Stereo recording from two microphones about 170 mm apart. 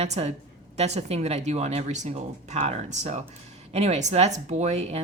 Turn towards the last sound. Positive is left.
turn(degrees=-40)  # may be behind; listen again after turning